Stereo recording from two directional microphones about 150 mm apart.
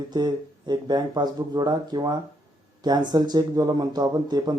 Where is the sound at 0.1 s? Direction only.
30° right (ahead or behind).